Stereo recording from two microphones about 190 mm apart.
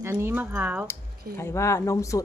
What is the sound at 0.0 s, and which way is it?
Speech, 15° right (ahead or behind).